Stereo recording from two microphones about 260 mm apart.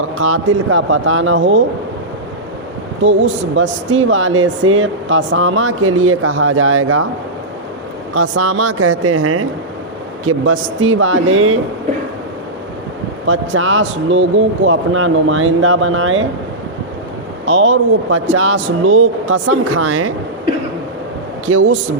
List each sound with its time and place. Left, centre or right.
0.2 s speech: right
3.0 s speech: right
8.1 s speech: right
13.2 s speech: right
17.4 s speech: right
21.4 s speech: right